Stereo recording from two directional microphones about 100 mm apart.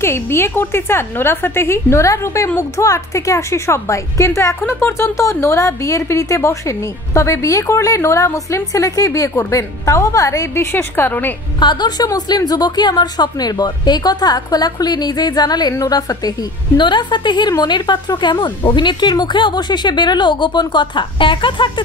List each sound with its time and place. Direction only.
0.0 s a woman's voice: 25° left (ahead or behind)
11.6 s a woman's voice: 45° left (ahead or behind)